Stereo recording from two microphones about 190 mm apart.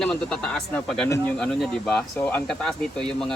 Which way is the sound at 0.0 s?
5° left (ahead or behind).